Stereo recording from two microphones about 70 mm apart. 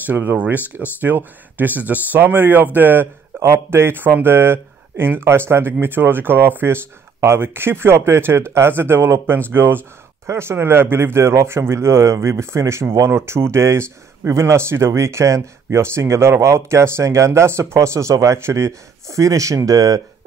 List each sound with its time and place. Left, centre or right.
0.0 s speech: right
3.3 s speech: right